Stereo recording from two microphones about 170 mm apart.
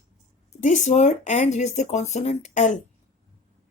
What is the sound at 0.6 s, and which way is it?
Speech, 45° left (ahead or behind).